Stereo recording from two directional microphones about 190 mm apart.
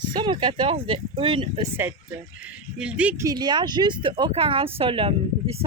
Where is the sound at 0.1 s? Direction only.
25° right (ahead or behind).